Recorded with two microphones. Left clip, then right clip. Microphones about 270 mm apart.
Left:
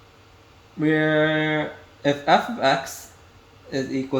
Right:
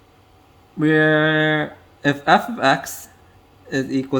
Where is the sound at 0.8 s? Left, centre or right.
Right.